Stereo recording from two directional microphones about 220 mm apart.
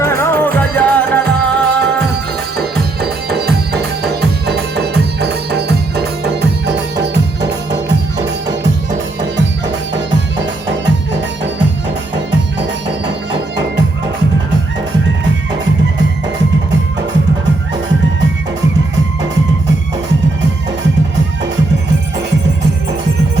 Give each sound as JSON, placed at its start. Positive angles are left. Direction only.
{"t": 0.0, "sound": "music", "side_deg": 10}
{"t": 3.0, "sound": "music", "side_deg": -45}